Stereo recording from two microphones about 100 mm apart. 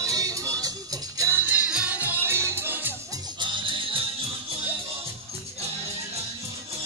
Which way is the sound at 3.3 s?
55° right (ahead or behind).